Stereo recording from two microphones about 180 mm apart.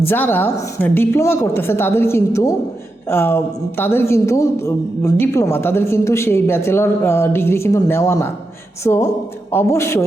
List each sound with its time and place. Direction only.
0.0 s a woman's voice: 10° left (ahead or behind)